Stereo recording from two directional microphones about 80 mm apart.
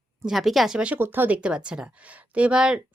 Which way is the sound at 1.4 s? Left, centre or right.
Centre.